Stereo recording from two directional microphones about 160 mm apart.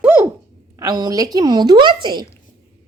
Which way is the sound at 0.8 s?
25° right (ahead or behind).